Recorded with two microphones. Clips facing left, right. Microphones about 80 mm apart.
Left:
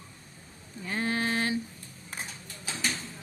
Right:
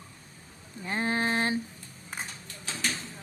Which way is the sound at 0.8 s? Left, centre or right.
Right.